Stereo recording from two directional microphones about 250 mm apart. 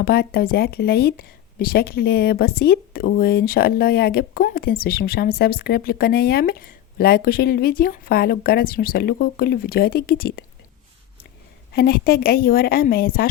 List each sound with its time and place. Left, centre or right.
0.0 s a woman's voice: left
11.7 s a woman's voice: left